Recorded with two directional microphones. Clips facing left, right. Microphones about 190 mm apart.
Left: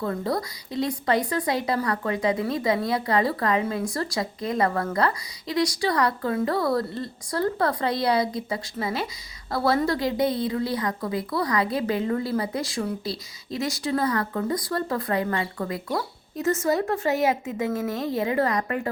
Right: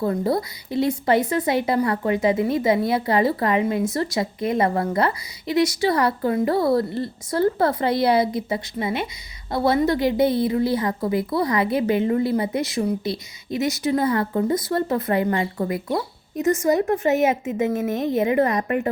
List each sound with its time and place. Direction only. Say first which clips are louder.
0.0 s speech: right 5 dB; 25° right (ahead or behind)